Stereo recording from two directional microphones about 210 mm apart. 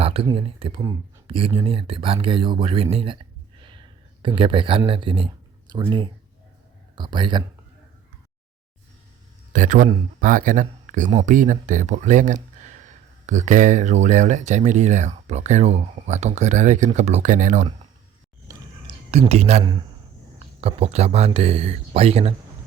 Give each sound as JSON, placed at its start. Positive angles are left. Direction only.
{"t": 0.0, "sound": "speech", "side_deg": -25}
{"t": 9.5, "sound": "a man's voice", "side_deg": -35}
{"t": 18.4, "sound": "a sound", "side_deg": -25}
{"t": 20.6, "sound": "speech", "side_deg": -30}